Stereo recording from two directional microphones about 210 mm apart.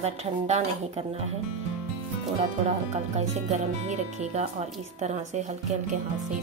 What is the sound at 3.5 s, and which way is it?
Speech, 35° right (ahead or behind).